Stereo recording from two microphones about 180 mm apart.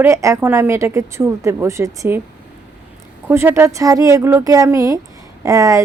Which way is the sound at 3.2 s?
10° right (ahead or behind).